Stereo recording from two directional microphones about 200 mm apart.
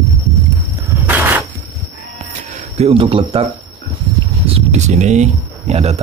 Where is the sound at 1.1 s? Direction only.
10° right (ahead or behind).